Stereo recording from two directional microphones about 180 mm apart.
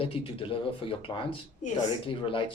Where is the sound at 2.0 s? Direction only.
30° left (ahead or behind).